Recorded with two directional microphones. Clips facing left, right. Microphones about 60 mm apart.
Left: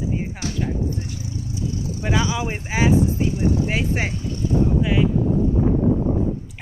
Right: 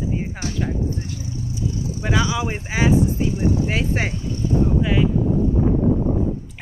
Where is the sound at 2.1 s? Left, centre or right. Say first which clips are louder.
Right 1 dB; centre.